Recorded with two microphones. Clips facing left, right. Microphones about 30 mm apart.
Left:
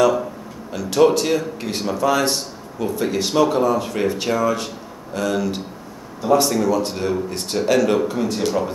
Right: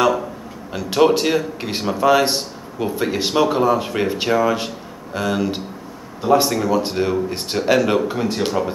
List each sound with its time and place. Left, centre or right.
0.7 s speech: right